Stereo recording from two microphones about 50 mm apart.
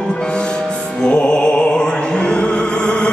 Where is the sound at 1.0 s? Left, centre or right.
Centre.